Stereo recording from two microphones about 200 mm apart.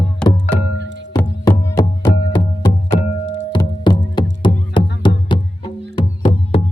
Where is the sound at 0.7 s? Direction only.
65° right (ahead or behind).